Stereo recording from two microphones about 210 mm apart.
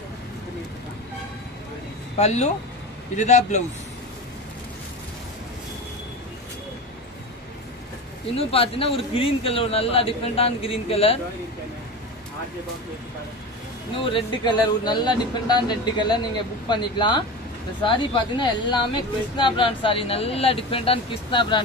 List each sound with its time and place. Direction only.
2.1 s a man's voice: 30° left (ahead or behind)
8.4 s a man's voice: 25° left (ahead or behind)
13.9 s a man's voice: 25° left (ahead or behind)